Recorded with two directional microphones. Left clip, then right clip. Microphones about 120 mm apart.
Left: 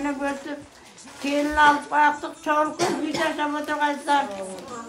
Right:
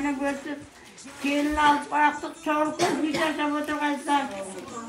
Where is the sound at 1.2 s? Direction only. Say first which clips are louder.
Left 3 dB; 15° left (ahead or behind).